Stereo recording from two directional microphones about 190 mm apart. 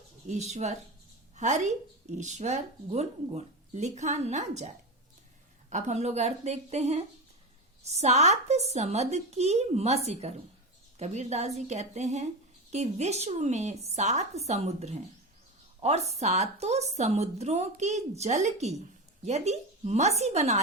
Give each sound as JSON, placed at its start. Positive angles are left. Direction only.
{"t": 0.3, "sound": "speech", "side_deg": -35}
{"t": 5.7, "sound": "speech", "side_deg": -35}